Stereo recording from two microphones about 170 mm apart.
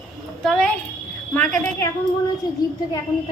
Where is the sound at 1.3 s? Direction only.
10° left (ahead or behind).